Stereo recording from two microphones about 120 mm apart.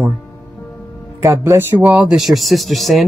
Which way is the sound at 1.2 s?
25° right (ahead or behind).